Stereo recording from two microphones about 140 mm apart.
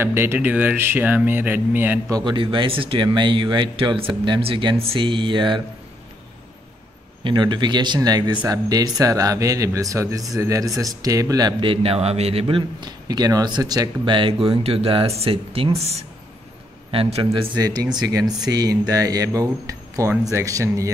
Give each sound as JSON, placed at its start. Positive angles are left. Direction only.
{"t": 0.0, "sound": "speech", "side_deg": -15}
{"t": 2.0, "sound": "a man's voice", "side_deg": -30}
{"t": 7.2, "sound": "a man's voice", "side_deg": -35}
{"t": 11.6, "sound": "a man's voice", "side_deg": -40}